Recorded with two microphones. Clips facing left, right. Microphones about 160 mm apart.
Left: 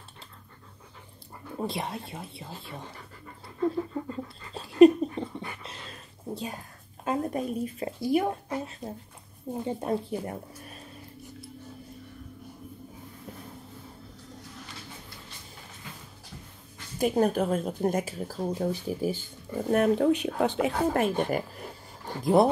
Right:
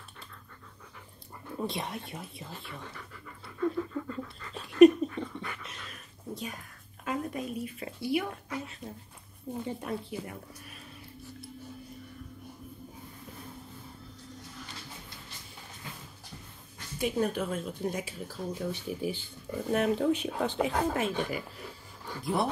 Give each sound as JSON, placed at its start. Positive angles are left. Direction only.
{"t": 1.6, "sound": "pant", "side_deg": 30}
{"t": 7.1, "sound": "a woman's voice", "side_deg": 40}
{"t": 17.0, "sound": "a woman's voice", "side_deg": 45}
{"t": 19.7, "sound": "speech", "side_deg": 55}
{"t": 20.9, "sound": "a sound", "side_deg": 50}